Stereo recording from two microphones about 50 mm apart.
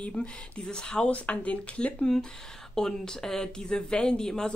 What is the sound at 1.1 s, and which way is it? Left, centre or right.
Speech, left.